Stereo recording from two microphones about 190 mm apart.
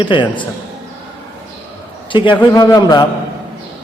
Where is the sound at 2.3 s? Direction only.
20° left (ahead or behind).